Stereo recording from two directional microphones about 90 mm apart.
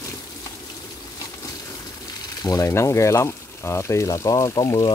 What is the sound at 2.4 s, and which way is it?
Speech, 40° left (ahead or behind).